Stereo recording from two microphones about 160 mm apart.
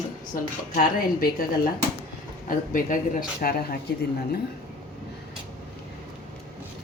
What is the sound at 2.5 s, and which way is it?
Speech, 55° left (ahead or behind).